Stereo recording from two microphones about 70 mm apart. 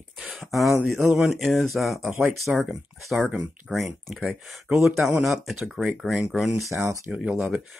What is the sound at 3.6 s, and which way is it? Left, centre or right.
Speech, centre.